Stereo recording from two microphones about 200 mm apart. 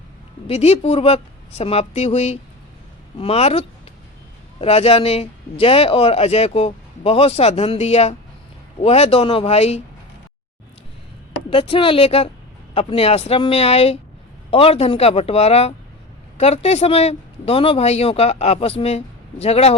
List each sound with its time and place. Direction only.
0.4 s a man's voice: 30° left (ahead or behind)
11.5 s a man's voice: 25° left (ahead or behind)